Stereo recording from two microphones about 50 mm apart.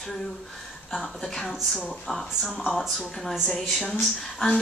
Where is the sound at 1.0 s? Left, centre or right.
Centre.